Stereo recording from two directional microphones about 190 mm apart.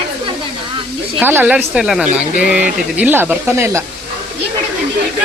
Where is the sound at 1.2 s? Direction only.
10° right (ahead or behind).